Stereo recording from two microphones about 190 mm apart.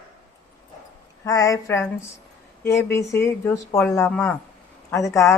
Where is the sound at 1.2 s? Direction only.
15° left (ahead or behind).